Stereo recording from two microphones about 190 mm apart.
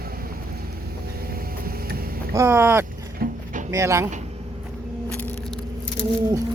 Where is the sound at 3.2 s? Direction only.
50° right (ahead or behind).